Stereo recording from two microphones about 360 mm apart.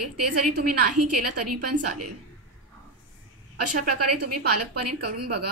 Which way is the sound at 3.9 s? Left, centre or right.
Right.